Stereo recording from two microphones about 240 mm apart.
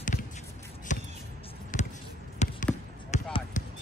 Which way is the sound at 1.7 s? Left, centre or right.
Left.